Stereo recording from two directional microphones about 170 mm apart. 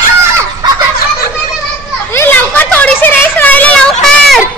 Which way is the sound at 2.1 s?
10° left (ahead or behind).